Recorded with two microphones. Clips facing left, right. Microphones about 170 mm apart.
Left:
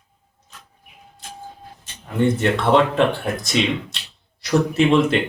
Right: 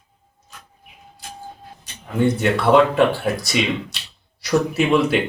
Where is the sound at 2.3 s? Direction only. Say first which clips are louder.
Right 3 dB; centre (ahead or behind).